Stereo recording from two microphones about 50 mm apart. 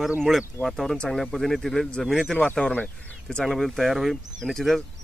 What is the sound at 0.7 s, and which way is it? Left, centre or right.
Speech, centre.